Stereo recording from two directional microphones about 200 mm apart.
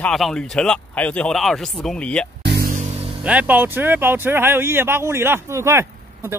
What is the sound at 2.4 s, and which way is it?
Music, 55° right (ahead or behind).